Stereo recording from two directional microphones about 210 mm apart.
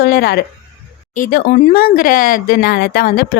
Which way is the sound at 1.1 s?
40° left (ahead or behind).